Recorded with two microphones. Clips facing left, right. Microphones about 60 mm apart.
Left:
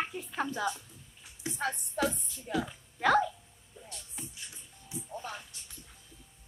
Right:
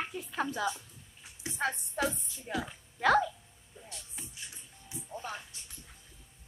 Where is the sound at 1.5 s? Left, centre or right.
Centre.